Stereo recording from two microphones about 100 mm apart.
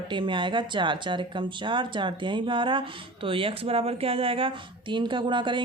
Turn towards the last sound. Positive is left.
turn(degrees=-50)  # may be behind; listen again after turning